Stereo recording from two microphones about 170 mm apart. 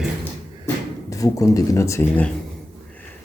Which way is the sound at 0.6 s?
20° left (ahead or behind).